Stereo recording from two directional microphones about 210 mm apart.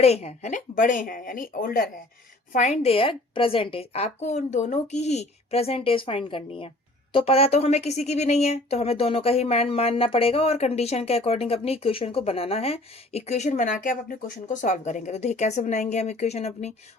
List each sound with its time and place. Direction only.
0.0 s a woman's voice: 30° left (ahead or behind)